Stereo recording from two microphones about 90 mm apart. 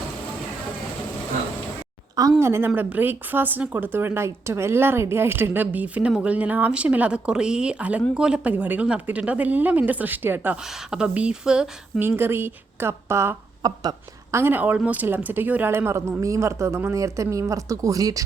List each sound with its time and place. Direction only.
2.4 s speech: 30° right (ahead or behind); by 11.7 s 10° right (ahead or behind)
11.9 s speech: 25° right (ahead or behind)
13.6 s a woman's voice: 45° right (ahead or behind)
14.3 s speech: 25° right (ahead or behind); by 18.2 s 40° right (ahead or behind)